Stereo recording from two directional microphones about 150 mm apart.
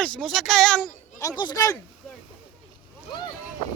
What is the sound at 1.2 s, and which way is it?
Speech, 25° left (ahead or behind).